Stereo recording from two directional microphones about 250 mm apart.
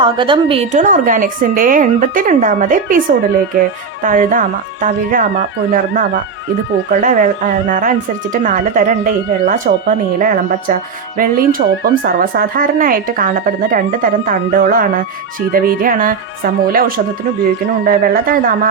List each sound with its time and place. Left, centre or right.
0.0 s speech: centre
4.0 s speech: right
17.8 s speech: right